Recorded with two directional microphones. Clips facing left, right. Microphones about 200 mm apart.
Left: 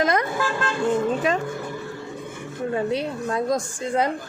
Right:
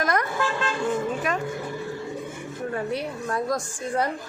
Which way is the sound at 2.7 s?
20° left (ahead or behind).